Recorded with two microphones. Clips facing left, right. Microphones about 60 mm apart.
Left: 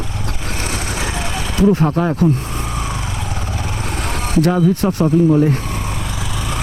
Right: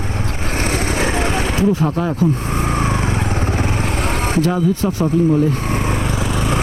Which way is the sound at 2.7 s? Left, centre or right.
Right.